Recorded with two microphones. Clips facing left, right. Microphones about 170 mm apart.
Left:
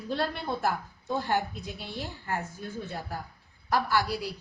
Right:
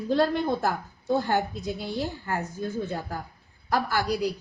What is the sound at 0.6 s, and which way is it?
A woman's voice, 35° right (ahead or behind).